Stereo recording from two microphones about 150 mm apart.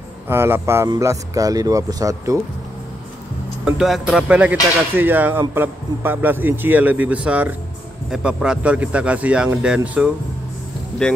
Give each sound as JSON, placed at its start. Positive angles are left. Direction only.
{"t": 0.3, "sound": "speech", "side_deg": -15}
{"t": 3.6, "sound": "speech", "side_deg": -5}
{"t": 11.0, "sound": "speech", "side_deg": 5}